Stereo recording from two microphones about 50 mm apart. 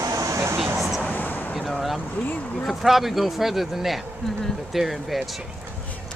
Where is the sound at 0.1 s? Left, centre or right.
Right.